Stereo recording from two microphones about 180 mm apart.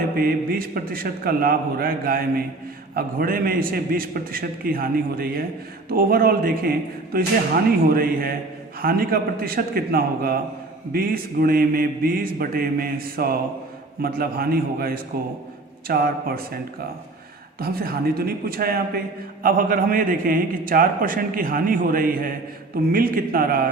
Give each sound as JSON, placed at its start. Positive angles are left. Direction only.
{"t": 0.2, "sound": "a man's voice", "side_deg": -55}
{"t": 17.6, "sound": "a man's voice", "side_deg": -60}